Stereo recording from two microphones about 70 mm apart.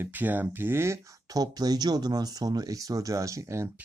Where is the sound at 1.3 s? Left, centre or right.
Right.